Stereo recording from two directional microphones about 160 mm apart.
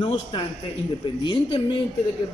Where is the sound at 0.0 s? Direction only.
30° left (ahead or behind).